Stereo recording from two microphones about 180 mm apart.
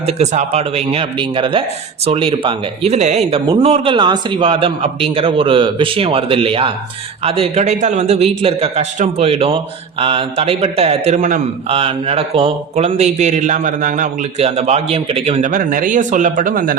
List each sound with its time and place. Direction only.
0.0 s a man's voice: 35° right (ahead or behind)
15.4 s speech: 50° right (ahead or behind)